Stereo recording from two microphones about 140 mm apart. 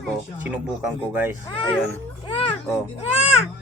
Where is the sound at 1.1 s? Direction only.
15° right (ahead or behind).